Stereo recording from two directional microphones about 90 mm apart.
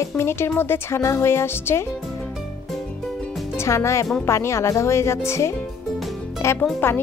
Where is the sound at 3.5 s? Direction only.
35° left (ahead or behind).